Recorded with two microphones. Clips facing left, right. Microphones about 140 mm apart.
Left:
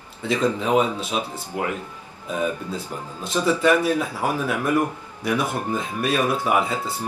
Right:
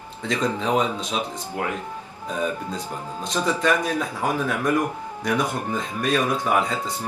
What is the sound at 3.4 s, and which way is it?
Speech, 10° left (ahead or behind).